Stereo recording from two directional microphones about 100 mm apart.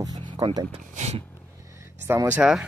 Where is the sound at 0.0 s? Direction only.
40° right (ahead or behind).